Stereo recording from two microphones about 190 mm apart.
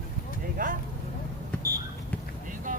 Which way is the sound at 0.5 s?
45° right (ahead or behind).